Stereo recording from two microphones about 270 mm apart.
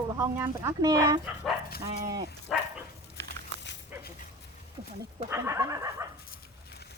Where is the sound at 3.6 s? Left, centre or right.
Left.